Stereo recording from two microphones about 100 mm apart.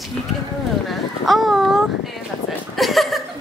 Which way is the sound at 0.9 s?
Centre (ahead or behind).